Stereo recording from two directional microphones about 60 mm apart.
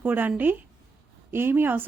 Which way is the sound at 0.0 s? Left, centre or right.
Right.